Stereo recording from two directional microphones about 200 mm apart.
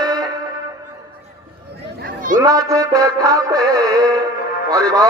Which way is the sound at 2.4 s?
20° right (ahead or behind).